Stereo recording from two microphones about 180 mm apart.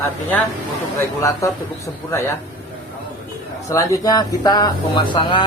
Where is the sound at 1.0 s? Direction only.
15° left (ahead or behind).